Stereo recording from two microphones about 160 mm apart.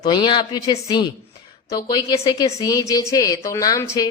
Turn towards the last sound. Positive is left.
turn(degrees=20)  # may be behind; listen again after turning